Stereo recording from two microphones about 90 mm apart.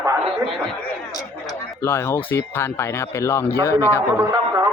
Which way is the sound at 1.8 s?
25° left (ahead or behind).